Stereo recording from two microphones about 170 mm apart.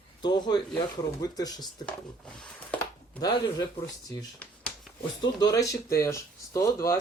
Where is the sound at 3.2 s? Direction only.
25° left (ahead or behind).